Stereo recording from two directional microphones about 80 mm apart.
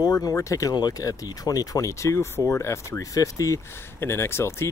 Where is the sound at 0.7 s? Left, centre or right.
Left.